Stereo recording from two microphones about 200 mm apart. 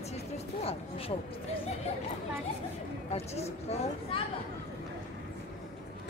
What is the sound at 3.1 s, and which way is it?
Speech, 30° left (ahead or behind).